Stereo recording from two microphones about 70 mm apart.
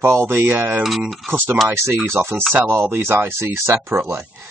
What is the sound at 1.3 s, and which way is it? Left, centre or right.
Speech, right.